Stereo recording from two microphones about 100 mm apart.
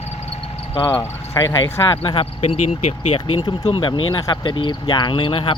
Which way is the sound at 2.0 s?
70° left (ahead or behind).